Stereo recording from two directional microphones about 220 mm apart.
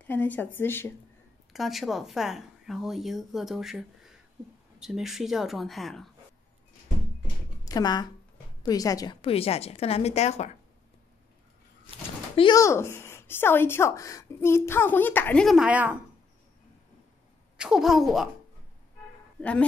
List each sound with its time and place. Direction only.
0.0 s speech: 10° left (ahead or behind)
7.6 s a woman's voice: 15° left (ahead or behind)
12.4 s speech: 20° left (ahead or behind); by 16.0 s 5° right (ahead or behind)
17.6 s speech: centre (ahead or behind)